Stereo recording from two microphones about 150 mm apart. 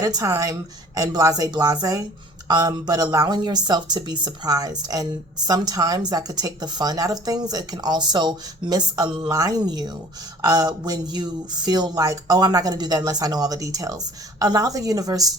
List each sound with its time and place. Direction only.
0.0 s speech: 25° right (ahead or behind)